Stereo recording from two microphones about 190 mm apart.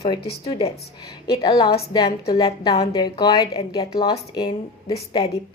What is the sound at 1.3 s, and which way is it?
A woman's voice, 20° left (ahead or behind).